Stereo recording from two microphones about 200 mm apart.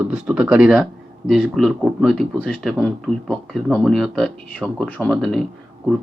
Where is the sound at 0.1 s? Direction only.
5° right (ahead or behind).